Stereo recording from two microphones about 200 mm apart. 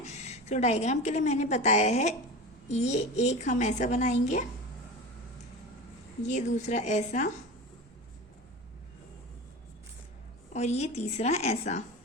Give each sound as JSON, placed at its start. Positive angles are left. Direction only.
{"t": 0.0, "sound": "a woman's voice", "side_deg": 35}
{"t": 6.2, "sound": "a woman's voice", "side_deg": 35}
{"t": 10.5, "sound": "a woman's voice", "side_deg": 35}